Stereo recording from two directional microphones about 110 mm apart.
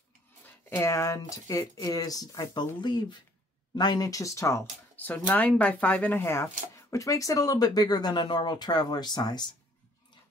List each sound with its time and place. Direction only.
0.7 s speech: 25° left (ahead or behind); by 9.5 s 40° left (ahead or behind)